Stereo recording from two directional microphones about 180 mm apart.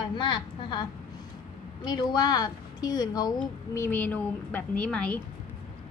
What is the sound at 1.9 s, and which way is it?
A woman's voice, 25° left (ahead or behind).